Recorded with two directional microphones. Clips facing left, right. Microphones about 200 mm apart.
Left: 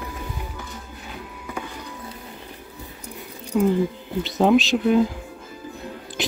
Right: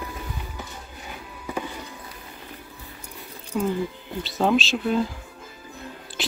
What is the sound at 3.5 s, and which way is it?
Speech, 5° left (ahead or behind).